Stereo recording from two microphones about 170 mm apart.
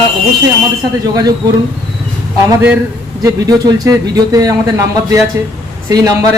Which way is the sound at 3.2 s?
20° right (ahead or behind).